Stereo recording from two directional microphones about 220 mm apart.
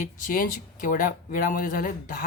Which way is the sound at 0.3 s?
40° left (ahead or behind).